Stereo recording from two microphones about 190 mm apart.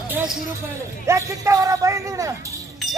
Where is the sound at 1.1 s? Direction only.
15° right (ahead or behind).